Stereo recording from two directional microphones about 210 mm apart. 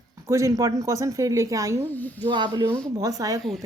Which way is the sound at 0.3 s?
15° right (ahead or behind).